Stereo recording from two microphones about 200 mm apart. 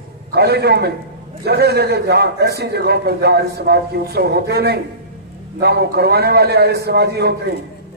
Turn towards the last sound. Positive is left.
turn(degrees=-55)  # may be behind; listen again after turning